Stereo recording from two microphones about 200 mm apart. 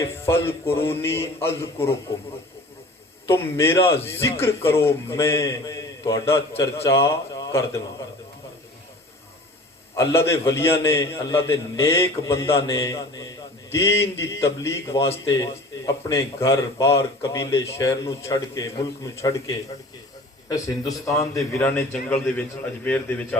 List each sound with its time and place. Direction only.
0.0 s speech: 10° left (ahead or behind)
3.2 s speech: 10° left (ahead or behind)
10.0 s speech: 15° left (ahead or behind)